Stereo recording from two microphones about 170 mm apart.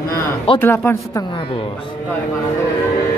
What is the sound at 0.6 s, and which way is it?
Speech, 15° left (ahead or behind).